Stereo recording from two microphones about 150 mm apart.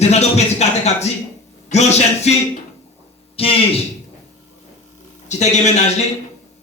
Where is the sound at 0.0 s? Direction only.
45° left (ahead or behind).